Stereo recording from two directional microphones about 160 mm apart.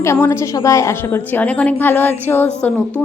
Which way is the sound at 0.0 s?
15° left (ahead or behind).